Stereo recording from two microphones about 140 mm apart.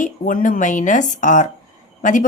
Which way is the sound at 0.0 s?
70° left (ahead or behind).